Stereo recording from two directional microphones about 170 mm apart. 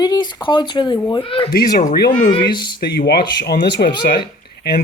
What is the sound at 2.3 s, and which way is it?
Speech, 25° left (ahead or behind).